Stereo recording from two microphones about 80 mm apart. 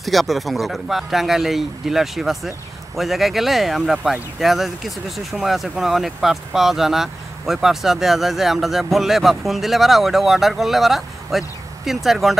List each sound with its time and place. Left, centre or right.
0.0 s speech: centre